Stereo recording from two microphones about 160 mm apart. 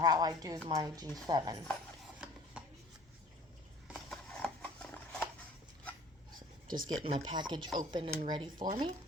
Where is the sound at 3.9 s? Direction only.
5° left (ahead or behind).